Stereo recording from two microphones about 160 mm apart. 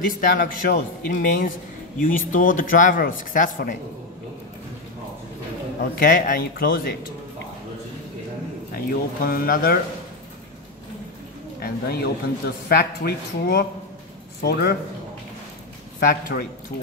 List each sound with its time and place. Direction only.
0.4 s speech: 65° left (ahead or behind)
5.9 s speech: 65° left (ahead or behind)
8.7 s speech: 65° left (ahead or behind)
11.6 s a man's voice: 80° left
16.0 s speech: 65° left (ahead or behind)